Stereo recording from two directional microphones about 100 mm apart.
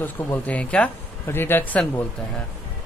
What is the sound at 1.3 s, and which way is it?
Speech, 20° left (ahead or behind).